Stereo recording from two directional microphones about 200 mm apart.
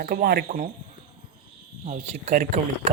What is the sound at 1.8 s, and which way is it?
Speech, 35° right (ahead or behind).